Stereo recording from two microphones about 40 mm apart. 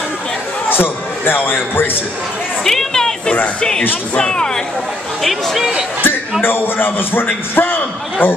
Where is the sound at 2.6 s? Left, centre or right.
Centre.